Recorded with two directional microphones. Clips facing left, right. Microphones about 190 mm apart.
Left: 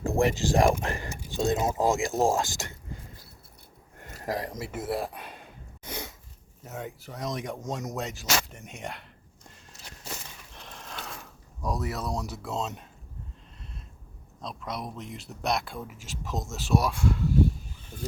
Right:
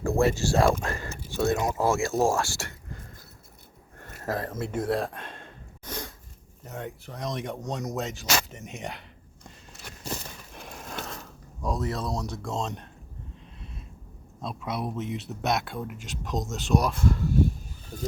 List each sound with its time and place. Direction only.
0.0 s speech: 15° left (ahead or behind)
4.0 s a sound: 15° left (ahead or behind)
6.7 s speech: centre (ahead or behind)
10.5 s a sound: 10° right (ahead or behind)
11.2 s speech: 10° left (ahead or behind)
14.4 s speech: 5° right (ahead or behind)
17.9 s speech: 40° right (ahead or behind)